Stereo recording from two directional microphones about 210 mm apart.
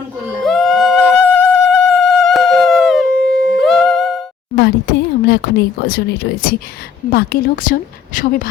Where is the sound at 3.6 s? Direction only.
Centre (ahead or behind).